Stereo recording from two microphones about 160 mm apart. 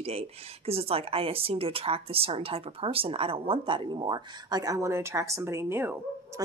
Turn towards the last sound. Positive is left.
turn(degrees=-15)  # may be behind; listen again after turning